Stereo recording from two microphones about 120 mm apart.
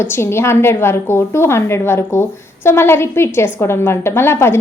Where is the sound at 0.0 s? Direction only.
20° left (ahead or behind).